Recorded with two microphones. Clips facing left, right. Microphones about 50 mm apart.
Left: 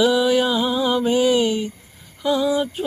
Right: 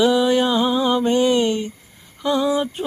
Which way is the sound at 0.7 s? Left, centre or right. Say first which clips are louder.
Right 1 dB; centre.